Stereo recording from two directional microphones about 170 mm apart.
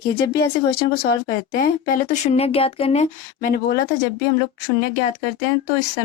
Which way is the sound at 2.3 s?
35° left (ahead or behind).